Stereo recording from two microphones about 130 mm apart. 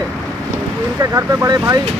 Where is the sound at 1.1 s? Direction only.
25° right (ahead or behind).